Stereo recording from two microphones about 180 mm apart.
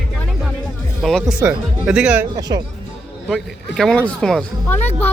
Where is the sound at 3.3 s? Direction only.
Centre (ahead or behind).